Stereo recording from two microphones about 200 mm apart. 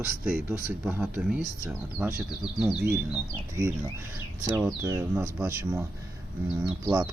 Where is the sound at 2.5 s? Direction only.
Centre (ahead or behind).